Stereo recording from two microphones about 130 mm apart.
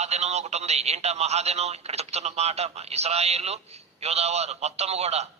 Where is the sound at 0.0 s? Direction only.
55° right (ahead or behind).